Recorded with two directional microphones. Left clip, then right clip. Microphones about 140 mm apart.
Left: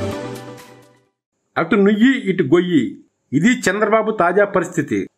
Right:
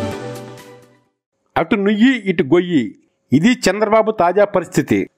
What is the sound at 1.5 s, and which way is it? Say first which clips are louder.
A man's voice: left 1 dB; 45° right (ahead or behind).